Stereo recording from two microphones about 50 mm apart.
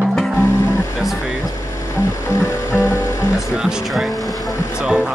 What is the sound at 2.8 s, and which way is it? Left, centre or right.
Music, left.